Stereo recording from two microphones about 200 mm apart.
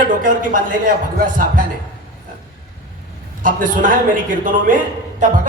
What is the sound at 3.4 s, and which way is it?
Speech, 40° right (ahead or behind).